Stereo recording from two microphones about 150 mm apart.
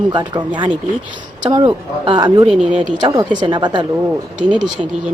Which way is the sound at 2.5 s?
5° right (ahead or behind).